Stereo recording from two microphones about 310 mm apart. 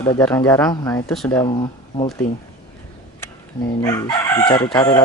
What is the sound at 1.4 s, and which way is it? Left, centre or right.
Speech, centre.